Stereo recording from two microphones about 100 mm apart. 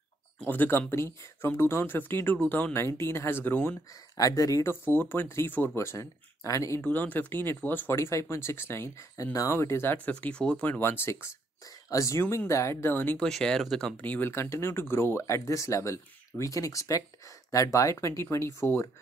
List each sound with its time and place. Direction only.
0.5 s speech: 20° left (ahead or behind)
2.7 s speech: 25° left (ahead or behind)
4.2 s speech: 35° left (ahead or behind)
4.8 s speech: 20° left (ahead or behind)
6.8 s speech: 15° left (ahead or behind)
10.0 s speech: 15° left (ahead or behind)
10.8 s speech: 25° left (ahead or behind)
13.2 s speech: 5° left (ahead or behind)
14.0 s speech: 20° left (ahead or behind)